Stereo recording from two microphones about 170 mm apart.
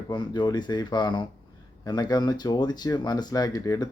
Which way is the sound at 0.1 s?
25° left (ahead or behind).